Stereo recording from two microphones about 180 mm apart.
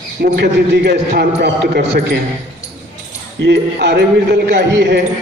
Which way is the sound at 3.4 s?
70° right (ahead or behind).